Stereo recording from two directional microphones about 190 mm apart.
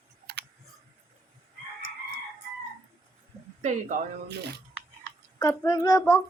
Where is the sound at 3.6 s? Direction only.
40° right (ahead or behind).